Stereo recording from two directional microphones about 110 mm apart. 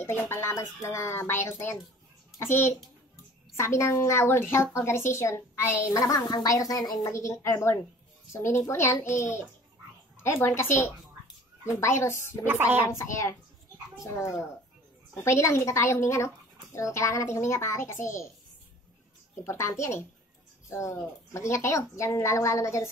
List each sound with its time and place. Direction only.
0.0 s a woman's voice: 20° left (ahead or behind)
6.0 s speech: 35° left (ahead or behind)
7.1 s a woman's voice: 25° left (ahead or behind)
12.2 s speech: 20° right (ahead or behind)
12.8 s a woman's voice: 25° left (ahead or behind)
19.4 s a woman's voice: 25° left (ahead or behind)